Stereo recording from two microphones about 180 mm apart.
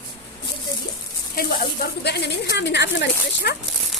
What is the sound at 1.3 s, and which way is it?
A woman's voice, 55° left (ahead or behind).